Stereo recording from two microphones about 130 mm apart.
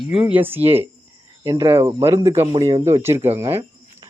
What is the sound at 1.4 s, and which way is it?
Speech, 30° right (ahead or behind).